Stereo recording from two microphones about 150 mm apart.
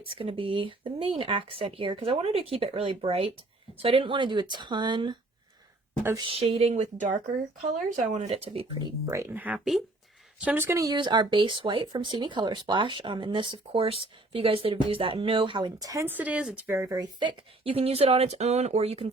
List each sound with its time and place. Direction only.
0.2 s speech: 35° right (ahead or behind)
6.1 s speech: 35° right (ahead or behind)
9.0 s speech: 15° right (ahead or behind); by 19.1 s 40° right (ahead or behind)